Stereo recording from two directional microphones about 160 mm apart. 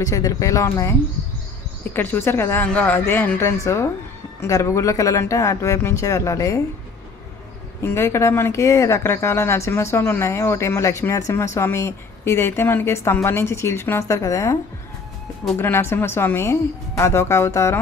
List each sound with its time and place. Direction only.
0.0 s speech: 20° left (ahead or behind)
2.0 s speech: 15° left (ahead or behind)
7.8 s speech: 15° left (ahead or behind)